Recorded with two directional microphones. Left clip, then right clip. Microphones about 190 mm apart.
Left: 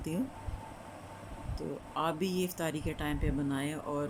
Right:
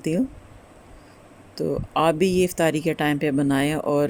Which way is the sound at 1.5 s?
45° right (ahead or behind).